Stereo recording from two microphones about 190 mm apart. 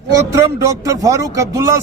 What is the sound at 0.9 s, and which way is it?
Speech, 15° right (ahead or behind).